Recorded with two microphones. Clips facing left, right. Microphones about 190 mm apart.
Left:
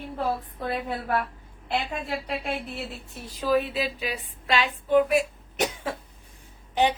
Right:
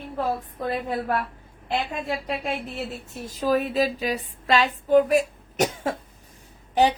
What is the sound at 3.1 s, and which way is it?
A woman's voice, 45° right (ahead or behind).